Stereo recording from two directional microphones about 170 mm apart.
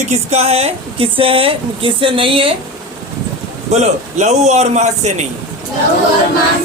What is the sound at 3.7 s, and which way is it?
Speech, 40° right (ahead or behind).